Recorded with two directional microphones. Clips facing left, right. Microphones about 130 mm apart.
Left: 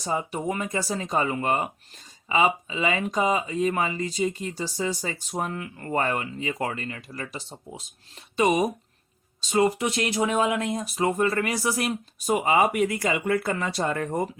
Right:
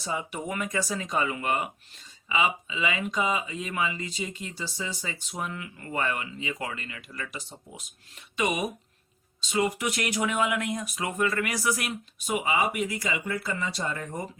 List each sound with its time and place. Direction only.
0.0 s speech: 40° left (ahead or behind); by 14.3 s 55° left (ahead or behind)